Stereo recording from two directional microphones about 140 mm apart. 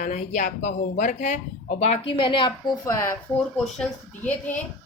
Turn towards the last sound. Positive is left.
turn(degrees=10)  # may be behind; listen again after turning